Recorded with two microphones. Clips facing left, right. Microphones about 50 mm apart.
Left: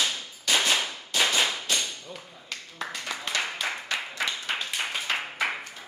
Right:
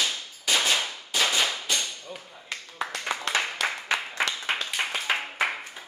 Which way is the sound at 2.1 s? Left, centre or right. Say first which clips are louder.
Right 2 dB; centre.